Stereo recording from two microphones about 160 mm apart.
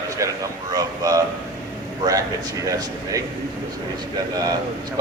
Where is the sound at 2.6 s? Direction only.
20° right (ahead or behind).